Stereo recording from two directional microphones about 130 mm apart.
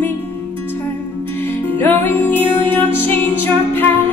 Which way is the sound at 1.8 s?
15° left (ahead or behind).